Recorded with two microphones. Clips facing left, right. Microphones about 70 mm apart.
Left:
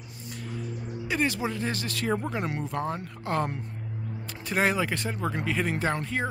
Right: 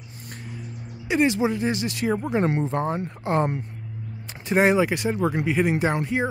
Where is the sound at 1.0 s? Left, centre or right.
Centre.